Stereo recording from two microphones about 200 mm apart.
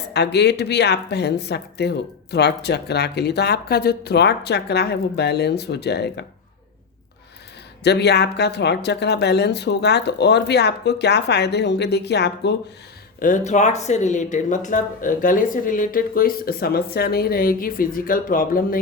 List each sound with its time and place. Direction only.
0.1 s speech: 55° left (ahead or behind)
7.9 s speech: 55° left (ahead or behind)
13.1 s speech: 40° left (ahead or behind)